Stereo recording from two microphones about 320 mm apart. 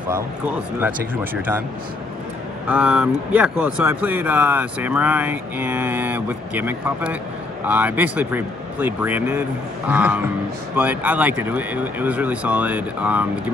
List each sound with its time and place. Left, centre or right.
0.7 s speech: centre
2.7 s speech: centre